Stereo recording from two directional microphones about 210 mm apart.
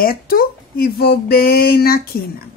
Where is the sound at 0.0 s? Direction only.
45° left (ahead or behind).